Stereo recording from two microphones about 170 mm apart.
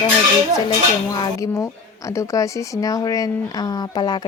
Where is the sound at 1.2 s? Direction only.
20° left (ahead or behind).